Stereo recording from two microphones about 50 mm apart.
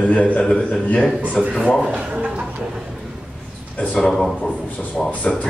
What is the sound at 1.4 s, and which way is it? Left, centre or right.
Speech, centre.